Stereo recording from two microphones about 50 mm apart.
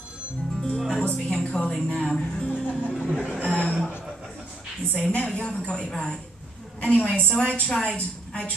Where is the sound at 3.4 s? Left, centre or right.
Left.